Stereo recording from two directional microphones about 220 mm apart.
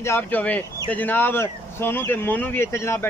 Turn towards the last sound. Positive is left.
turn(degrees=10)  # may be behind; listen again after turning